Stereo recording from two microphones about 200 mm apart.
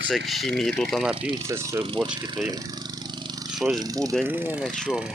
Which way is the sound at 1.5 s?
15° right (ahead or behind).